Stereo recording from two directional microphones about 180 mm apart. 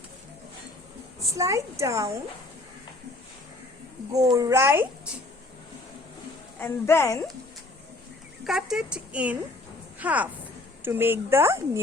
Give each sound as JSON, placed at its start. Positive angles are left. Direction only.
{"t": 1.4, "sound": "speech", "side_deg": -15}
{"t": 4.1, "sound": "speech", "side_deg": -20}
{"t": 6.6, "sound": "a woman's voice", "side_deg": 15}
{"t": 8.4, "sound": "speech", "side_deg": -5}